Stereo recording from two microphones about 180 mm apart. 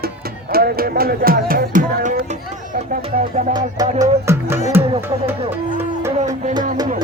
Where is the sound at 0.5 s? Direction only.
55° right (ahead or behind).